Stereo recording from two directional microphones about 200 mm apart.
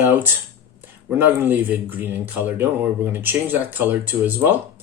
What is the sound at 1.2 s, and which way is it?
Speech, 10° right (ahead or behind).